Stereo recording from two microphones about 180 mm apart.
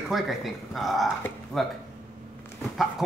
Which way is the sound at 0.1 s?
Centre (ahead or behind).